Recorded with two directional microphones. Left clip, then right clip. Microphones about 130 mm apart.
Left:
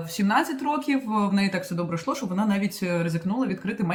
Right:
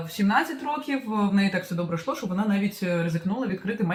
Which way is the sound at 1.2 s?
30° left (ahead or behind).